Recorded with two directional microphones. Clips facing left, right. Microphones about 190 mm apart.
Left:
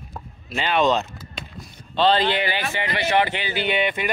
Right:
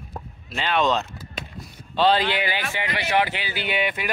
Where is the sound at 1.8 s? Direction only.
10° right (ahead or behind).